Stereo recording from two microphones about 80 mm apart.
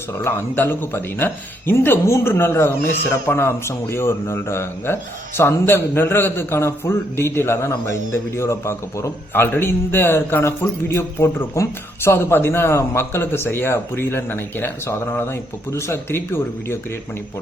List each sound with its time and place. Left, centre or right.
0.5 s a man's voice: left
9.3 s a man's voice: left